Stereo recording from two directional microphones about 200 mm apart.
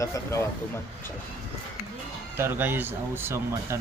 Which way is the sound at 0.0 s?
15° left (ahead or behind).